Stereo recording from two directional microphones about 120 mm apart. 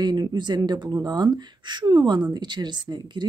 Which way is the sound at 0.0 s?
35° right (ahead or behind).